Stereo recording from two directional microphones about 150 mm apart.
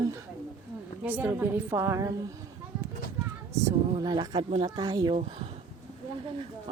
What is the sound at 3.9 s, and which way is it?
A woman's voice, 30° right (ahead or behind).